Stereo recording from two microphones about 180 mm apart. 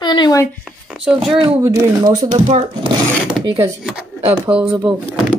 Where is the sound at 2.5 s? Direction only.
35° right (ahead or behind).